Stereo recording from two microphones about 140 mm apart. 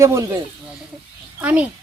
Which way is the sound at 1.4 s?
10° right (ahead or behind).